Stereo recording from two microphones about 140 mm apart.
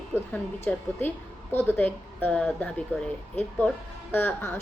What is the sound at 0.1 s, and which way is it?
A woman's voice, 15° left (ahead or behind).